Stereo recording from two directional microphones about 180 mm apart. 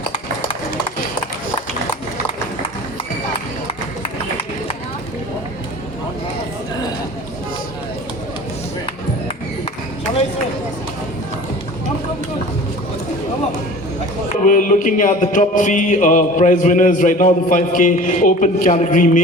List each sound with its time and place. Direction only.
14.4 s music: 45° left (ahead or behind)